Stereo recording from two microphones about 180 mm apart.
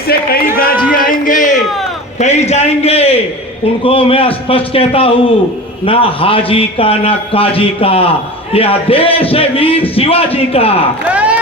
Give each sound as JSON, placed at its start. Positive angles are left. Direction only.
{"t": 0.1, "sound": "a man's voice", "side_deg": 55}
{"t": 11.1, "sound": "speech", "side_deg": -5}